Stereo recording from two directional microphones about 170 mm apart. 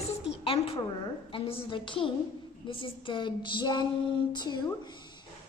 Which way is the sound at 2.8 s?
30° left (ahead or behind).